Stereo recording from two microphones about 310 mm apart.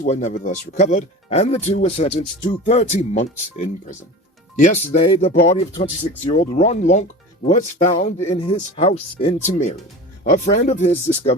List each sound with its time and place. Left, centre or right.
0.0 s speech: left
4.5 s speech: left